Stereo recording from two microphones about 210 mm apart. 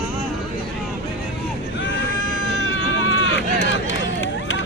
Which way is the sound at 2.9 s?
65° left (ahead or behind).